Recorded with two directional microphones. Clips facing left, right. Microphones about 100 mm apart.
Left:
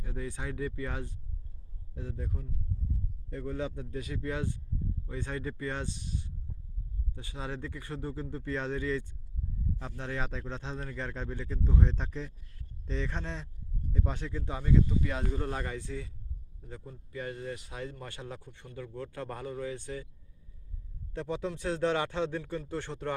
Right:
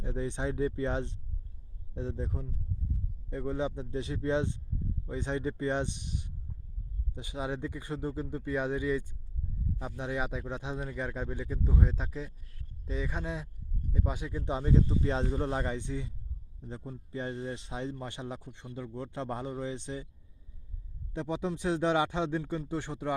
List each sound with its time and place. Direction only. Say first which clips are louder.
0.0 s a man's voice: right 5 dB; 25° right (ahead or behind)
3.2 s a man's voice: right 3 dB; 20° right (ahead or behind)
21.1 s speech: right 1 dB; 15° right (ahead or behind)